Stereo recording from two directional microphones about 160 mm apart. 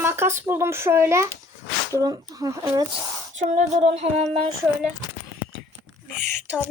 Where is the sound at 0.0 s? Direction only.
15° right (ahead or behind).